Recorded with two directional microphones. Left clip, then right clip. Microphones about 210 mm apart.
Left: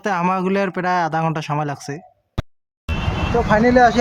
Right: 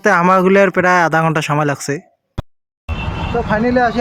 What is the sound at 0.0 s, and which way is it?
Speech, 15° right (ahead or behind).